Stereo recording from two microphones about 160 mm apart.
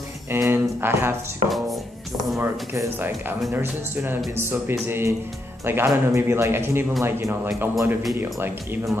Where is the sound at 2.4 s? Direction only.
15° right (ahead or behind).